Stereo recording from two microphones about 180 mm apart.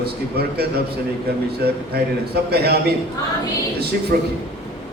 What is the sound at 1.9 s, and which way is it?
Speech, 60° right (ahead or behind).